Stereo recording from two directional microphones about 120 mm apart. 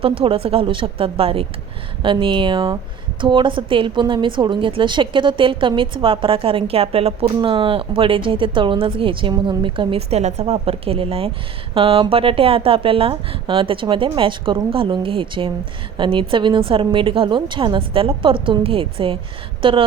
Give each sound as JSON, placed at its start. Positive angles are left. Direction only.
{"t": 0.0, "sound": "a woman's voice", "side_deg": -50}